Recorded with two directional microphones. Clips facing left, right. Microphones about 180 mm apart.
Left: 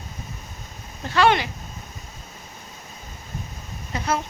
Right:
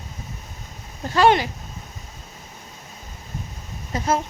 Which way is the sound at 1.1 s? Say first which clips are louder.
Right 2 dB; 40° right (ahead or behind).